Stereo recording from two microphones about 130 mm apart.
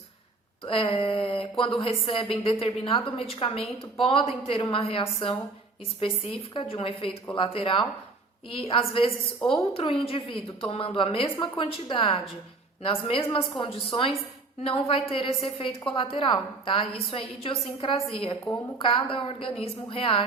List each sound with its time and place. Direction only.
0.6 s a woman's voice: 45° left (ahead or behind)